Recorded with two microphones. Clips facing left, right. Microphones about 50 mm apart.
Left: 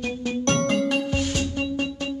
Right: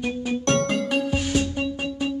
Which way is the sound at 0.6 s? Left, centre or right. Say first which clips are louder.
Left 1 dB; centre.